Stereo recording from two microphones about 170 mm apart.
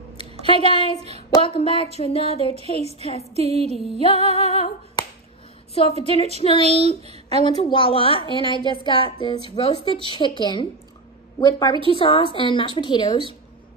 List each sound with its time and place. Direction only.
0.5 s speech: 30° left (ahead or behind)
0.9 s speech: 35° right (ahead or behind)
1.3 s a woman's voice: 35° left (ahead or behind)
3.3 s speech: 40° right (ahead or behind)
3.7 s music: centre (ahead or behind)
4.2 s speech: 40° right (ahead or behind)
5.9 s speech: 35° right (ahead or behind)
6.3 s a woman's voice: 35° left (ahead or behind)
6.6 s speech: 35° right (ahead or behind)
7.4 s a woman's voice: 30° left (ahead or behind)